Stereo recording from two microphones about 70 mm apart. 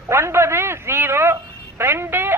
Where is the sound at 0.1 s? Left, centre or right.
Right.